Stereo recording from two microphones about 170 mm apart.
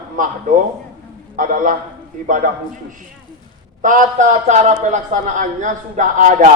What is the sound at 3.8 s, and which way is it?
A man's voice, 50° right (ahead or behind).